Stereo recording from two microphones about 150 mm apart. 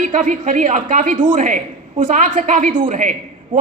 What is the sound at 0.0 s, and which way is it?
A man's voice, 55° right (ahead or behind).